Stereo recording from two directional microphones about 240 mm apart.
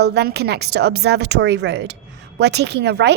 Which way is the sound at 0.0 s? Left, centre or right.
Right.